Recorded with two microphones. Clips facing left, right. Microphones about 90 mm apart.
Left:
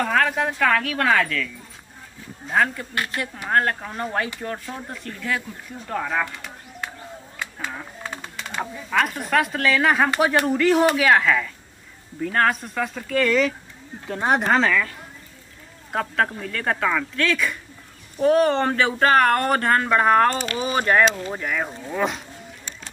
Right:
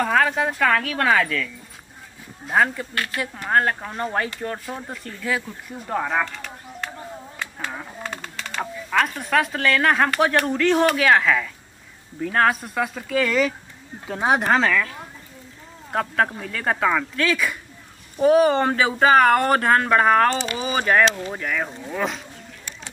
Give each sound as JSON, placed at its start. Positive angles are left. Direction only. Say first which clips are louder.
{"t": 0.0, "sound": "speech", "louder": "right 1 dB", "side_deg": -5}
{"t": 2.9, "sound": "speech", "louder": "even", "side_deg": 20}
{"t": 3.4, "sound": "speech", "louder": "right 1 dB", "side_deg": -5}
{"t": 6.2, "sound": "bird", "louder": "right 1 dB", "side_deg": 10}
{"t": 7.5, "sound": "a sound", "louder": "even", "side_deg": -5}
{"t": 8.0, "sound": "a sound", "louder": "right 1 dB", "side_deg": 10}
{"t": 8.9, "sound": "speech", "louder": "even", "side_deg": 5}